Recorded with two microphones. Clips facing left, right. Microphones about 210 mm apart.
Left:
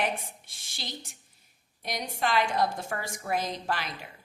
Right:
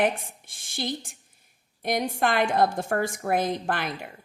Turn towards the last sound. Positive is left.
turn(degrees=-55)  # may be behind; listen again after turning